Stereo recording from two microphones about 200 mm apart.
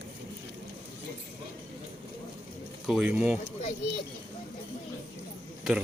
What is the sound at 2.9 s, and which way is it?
Speech, 5° right (ahead or behind).